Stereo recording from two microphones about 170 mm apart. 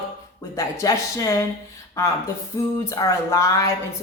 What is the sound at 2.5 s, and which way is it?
A woman's voice, 20° left (ahead or behind).